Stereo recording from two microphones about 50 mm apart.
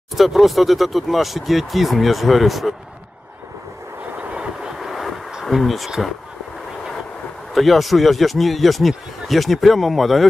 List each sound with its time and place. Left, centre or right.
0.1 s speech: centre
4.2 s vehicle: right
4.6 s bee: centre
7.5 s speech: centre